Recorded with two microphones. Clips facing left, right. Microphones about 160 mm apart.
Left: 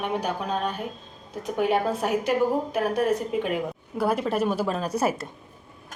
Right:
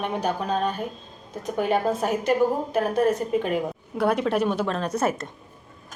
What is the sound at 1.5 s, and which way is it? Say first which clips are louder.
A woman's voice: right 1 dB; 10° left (ahead or behind).